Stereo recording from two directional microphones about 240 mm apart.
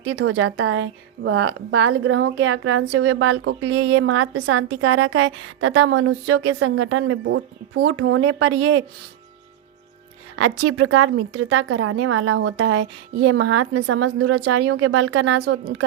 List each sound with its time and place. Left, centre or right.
0.0 s a woman's voice: right
10.3 s a woman's voice: right